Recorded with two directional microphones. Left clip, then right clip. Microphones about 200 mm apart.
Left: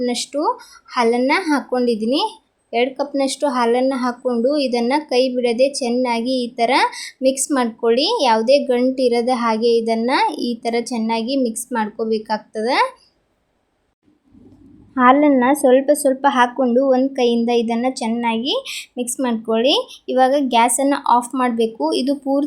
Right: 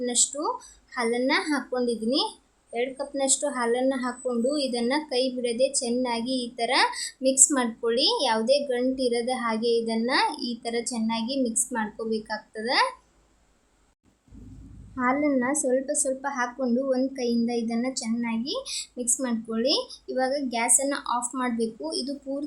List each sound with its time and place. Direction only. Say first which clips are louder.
0.0 s speech: left 7 dB; 25° left (ahead or behind)
14.9 s speech: left 12 dB; 30° left (ahead or behind)